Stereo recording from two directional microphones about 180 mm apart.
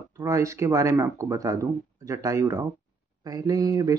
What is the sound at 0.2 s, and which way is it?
Speech, 15° right (ahead or behind).